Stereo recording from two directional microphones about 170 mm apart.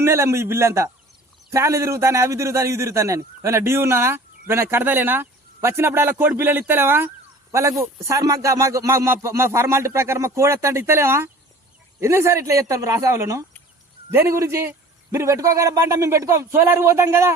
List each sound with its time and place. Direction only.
0.0 s a man's voice: 15° right (ahead or behind)